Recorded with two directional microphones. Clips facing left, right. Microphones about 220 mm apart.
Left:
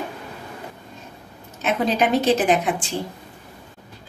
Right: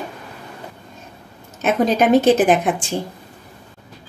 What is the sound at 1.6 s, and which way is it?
A woman's voice, 50° right (ahead or behind).